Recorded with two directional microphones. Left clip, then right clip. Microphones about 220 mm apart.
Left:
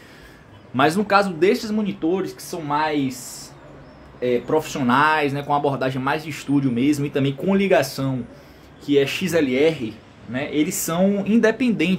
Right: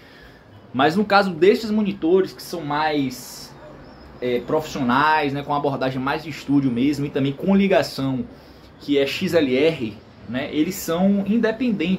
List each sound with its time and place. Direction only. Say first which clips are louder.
0.7 s a man's voice: even; 15° left (ahead or behind)
4.2 s a man's voice: left 2 dB; 25° left (ahead or behind)
11.2 s speech: left 3 dB; 45° left (ahead or behind)